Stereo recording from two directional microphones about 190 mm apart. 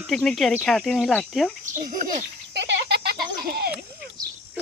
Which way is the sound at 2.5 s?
65° right (ahead or behind).